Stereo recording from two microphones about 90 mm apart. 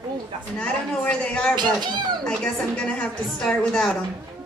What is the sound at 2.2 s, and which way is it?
Speech, 10° left (ahead or behind).